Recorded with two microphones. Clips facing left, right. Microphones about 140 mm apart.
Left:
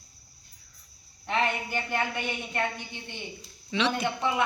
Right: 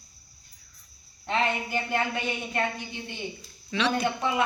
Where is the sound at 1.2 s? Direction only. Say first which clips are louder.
Right 1 dB; 20° right (ahead or behind).